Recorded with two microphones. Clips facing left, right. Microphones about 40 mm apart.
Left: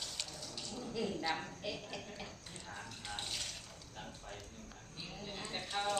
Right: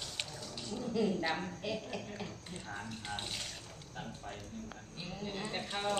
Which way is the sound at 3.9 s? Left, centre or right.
Centre.